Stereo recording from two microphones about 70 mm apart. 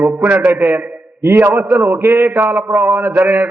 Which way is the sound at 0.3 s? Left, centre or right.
Right.